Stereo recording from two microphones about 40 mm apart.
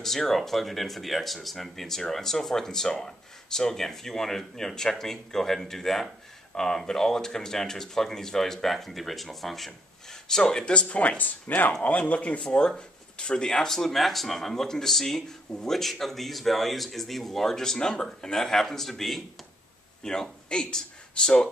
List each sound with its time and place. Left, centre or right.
0.0 s speech: centre
10.2 s speech: centre
10.9 s speech: left
12.0 s speech: left; by 20.2 s centre
20.4 s speech: left